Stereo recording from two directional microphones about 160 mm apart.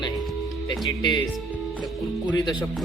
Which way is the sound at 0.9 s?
25° left (ahead or behind).